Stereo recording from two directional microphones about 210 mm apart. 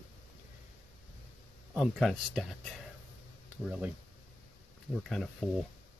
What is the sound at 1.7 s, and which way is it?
Speech, centre (ahead or behind).